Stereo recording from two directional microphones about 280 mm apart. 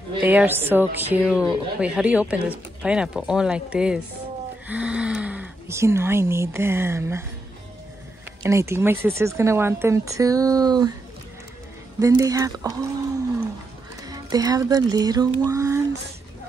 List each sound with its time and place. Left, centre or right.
0.2 s a woman's voice: centre
8.4 s speech: centre
12.0 s speech: centre
14.0 s speech: centre
15.4 s a sound: centre